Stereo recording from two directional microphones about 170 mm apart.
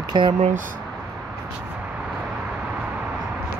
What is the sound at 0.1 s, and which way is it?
Speech, 25° right (ahead or behind).